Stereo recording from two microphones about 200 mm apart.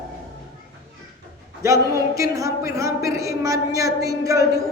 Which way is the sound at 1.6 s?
15° right (ahead or behind).